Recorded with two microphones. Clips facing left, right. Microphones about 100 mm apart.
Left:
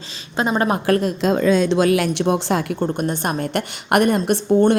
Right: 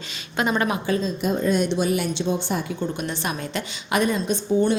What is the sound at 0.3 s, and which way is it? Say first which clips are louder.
Speech: left 3 dB; 30° left (ahead or behind).